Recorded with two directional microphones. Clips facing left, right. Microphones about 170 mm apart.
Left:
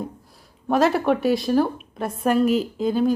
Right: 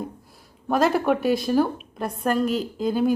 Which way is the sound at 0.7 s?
Centre (ahead or behind).